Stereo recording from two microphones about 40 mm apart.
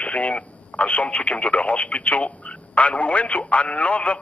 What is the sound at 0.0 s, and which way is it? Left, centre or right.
A man's voice, left.